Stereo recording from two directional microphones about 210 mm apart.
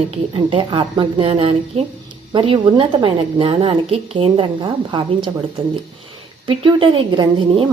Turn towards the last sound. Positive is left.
turn(degrees=-25)  # may be behind; listen again after turning